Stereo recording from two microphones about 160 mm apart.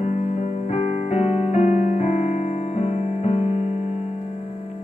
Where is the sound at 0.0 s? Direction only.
45° left (ahead or behind).